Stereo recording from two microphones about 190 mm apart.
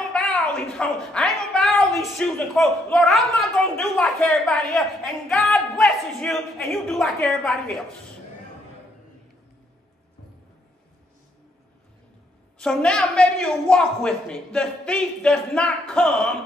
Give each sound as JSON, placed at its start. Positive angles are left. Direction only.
{"t": 0.1, "sound": "a woman's voice", "side_deg": 5}
{"t": 12.5, "sound": "a woman's voice", "side_deg": 5}